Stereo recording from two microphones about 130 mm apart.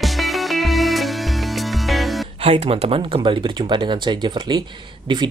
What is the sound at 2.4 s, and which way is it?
Speech, 50° right (ahead or behind).